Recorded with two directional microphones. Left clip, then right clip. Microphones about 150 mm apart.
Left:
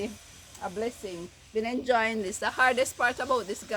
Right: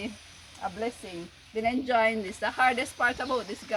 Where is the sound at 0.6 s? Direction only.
45° left (ahead or behind).